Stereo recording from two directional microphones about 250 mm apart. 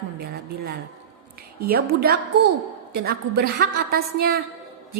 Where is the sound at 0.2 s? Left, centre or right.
Right.